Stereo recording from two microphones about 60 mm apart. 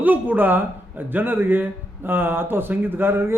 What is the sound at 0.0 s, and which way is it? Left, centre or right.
A man's voice, right.